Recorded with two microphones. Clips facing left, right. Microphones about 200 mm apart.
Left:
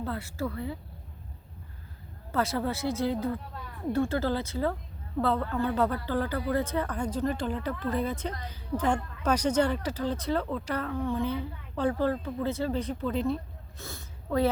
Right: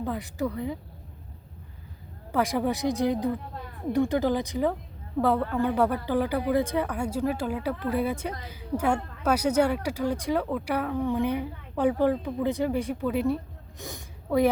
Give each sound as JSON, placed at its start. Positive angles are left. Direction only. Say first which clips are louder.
{"t": 0.0, "sound": "speech", "louder": "right 3 dB", "side_deg": -15}
{"t": 2.3, "sound": "speech", "louder": "right 3 dB", "side_deg": -15}